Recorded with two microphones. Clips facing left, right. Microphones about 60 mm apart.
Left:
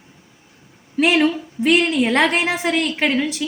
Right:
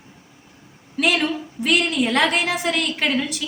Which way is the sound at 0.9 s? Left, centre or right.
Left.